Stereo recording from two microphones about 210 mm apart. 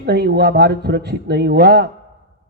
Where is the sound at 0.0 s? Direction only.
50° right (ahead or behind).